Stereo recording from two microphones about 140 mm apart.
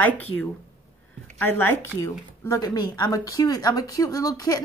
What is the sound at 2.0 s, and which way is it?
Speech, 25° left (ahead or behind).